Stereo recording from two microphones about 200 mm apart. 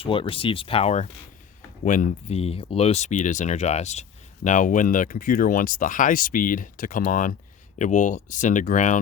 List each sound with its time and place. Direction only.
0.0 s speech: 25° left (ahead or behind)